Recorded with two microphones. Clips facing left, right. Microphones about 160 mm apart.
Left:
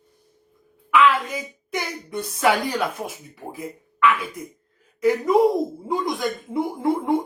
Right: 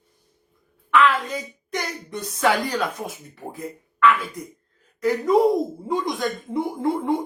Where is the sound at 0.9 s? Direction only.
10° left (ahead or behind).